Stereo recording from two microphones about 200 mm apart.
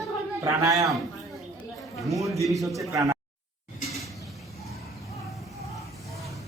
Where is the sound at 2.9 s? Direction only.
15° right (ahead or behind).